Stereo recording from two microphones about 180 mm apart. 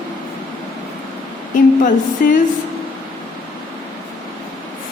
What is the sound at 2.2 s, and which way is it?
Speech, 50° left (ahead or behind).